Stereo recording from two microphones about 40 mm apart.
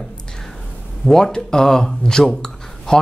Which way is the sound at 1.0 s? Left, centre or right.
Centre.